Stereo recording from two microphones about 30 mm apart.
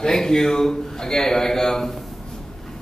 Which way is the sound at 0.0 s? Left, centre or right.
Left.